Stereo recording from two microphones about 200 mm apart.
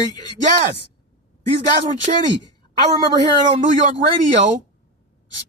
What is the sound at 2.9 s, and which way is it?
Speech, 20° right (ahead or behind).